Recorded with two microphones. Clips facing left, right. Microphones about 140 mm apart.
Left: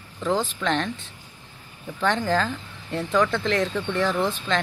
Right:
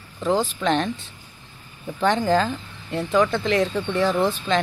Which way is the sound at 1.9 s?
15° right (ahead or behind).